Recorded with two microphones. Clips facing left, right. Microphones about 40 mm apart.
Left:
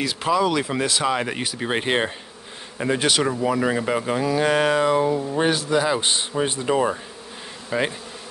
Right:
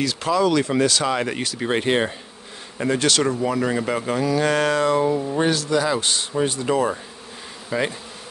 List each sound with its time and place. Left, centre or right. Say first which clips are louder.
0.0 s speech: right 1 dB; centre
5.4 s a man's voice: left 1 dB; centre